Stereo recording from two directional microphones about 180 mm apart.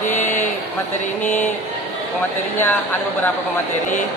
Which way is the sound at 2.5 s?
10° left (ahead or behind).